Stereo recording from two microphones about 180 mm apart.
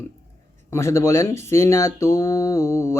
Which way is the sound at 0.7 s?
15° left (ahead or behind).